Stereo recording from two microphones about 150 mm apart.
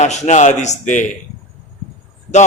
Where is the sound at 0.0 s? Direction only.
50° left (ahead or behind).